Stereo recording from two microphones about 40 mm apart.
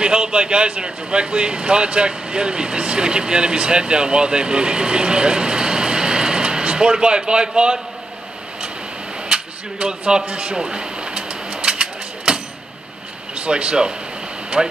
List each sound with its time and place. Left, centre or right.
0.0 s speech: right
9.3 s a sound: right
13.3 s speech: right